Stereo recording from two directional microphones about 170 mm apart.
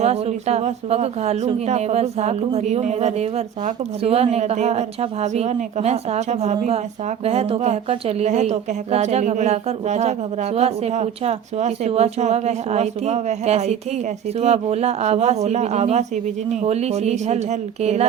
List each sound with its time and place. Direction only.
0.0 s speech: 40° right (ahead or behind)